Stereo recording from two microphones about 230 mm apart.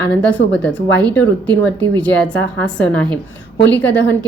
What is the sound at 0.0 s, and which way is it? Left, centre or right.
A woman's voice, centre.